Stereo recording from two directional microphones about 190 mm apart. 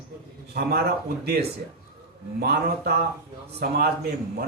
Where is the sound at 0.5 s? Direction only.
55° right (ahead or behind).